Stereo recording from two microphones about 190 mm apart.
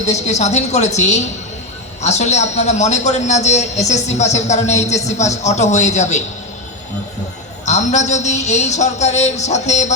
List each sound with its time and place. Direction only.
0.0 s a man's voice: 35° left (ahead or behind)
7.6 s a man's voice: 40° left (ahead or behind)